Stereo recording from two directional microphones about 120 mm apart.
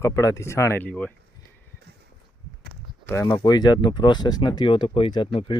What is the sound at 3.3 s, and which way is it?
Speech, 35° left (ahead or behind).